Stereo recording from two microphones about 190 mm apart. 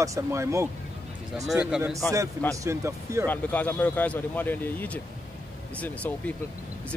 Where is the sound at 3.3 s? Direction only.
10° left (ahead or behind).